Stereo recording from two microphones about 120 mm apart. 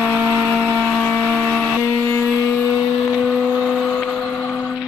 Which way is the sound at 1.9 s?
20° left (ahead or behind).